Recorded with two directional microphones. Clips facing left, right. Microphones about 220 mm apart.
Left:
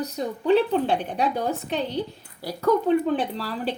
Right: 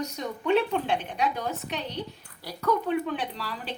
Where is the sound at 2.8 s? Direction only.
35° left (ahead or behind).